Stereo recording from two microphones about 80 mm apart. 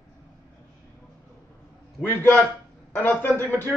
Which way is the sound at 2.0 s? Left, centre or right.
Left.